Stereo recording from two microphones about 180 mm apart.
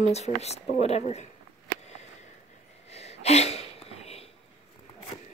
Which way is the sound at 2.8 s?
35° left (ahead or behind).